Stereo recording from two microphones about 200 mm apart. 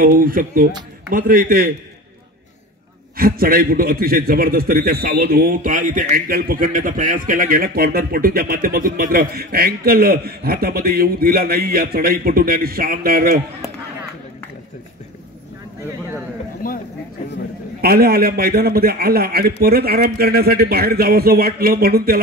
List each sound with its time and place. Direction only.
0.0 s a man's voice: 45° right (ahead or behind)
3.2 s a man's voice: 45° right (ahead or behind)
16.6 s a sound: 45° left (ahead or behind)
17.8 s a man's voice: 50° right (ahead or behind)